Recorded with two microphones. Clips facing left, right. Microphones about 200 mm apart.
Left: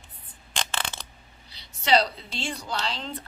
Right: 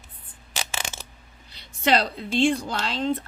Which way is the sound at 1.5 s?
50° right (ahead or behind).